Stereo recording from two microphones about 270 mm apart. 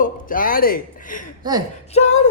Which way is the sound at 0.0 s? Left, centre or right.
Left.